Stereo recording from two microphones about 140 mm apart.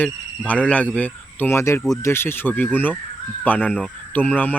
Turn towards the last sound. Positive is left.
turn(degrees=10)  # may be behind; listen again after turning